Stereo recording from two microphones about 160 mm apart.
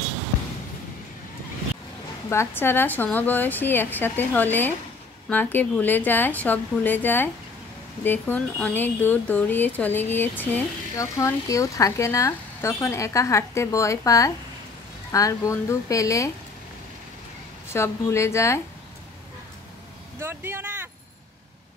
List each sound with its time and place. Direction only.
2.2 s speech: 15° left (ahead or behind)
17.7 s speech: 15° left (ahead or behind)
20.2 s vehicle: 15° right (ahead or behind)